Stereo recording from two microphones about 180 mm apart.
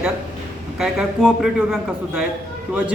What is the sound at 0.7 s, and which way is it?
A man's voice, 5° right (ahead or behind).